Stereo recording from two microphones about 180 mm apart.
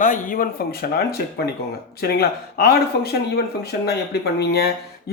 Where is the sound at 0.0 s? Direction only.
45° left (ahead or behind).